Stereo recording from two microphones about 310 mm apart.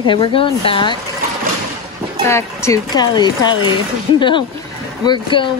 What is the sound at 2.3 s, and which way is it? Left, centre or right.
Speech, centre.